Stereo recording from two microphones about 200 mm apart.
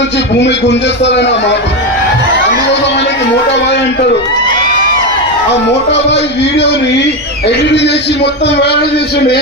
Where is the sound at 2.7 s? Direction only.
60° left (ahead or behind).